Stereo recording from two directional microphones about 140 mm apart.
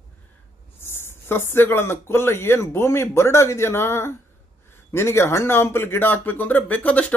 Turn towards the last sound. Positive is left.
turn(degrees=10)  # may be behind; listen again after turning